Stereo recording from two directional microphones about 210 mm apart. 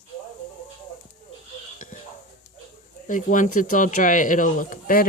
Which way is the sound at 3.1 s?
40° left (ahead or behind).